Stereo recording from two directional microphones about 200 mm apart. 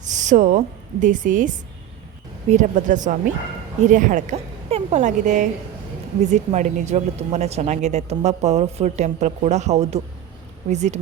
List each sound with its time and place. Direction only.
0.0 s a woman's voice: 35° right (ahead or behind)